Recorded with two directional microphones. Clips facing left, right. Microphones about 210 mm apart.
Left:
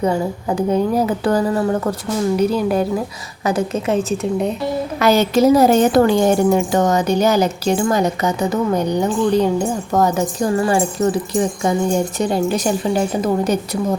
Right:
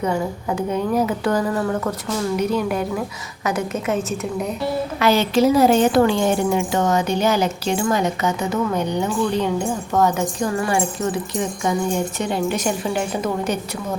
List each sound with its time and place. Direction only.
0.0 s a woman's voice: 35° left (ahead or behind)
4.9 s a woman's voice: 40° left (ahead or behind)